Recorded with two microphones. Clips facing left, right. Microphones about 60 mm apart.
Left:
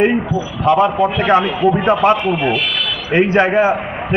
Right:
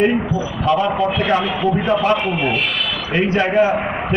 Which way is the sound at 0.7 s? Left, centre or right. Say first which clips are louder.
Left 4 dB; left.